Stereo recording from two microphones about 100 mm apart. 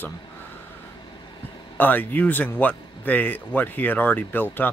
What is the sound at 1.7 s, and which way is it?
Speech, 20° left (ahead or behind).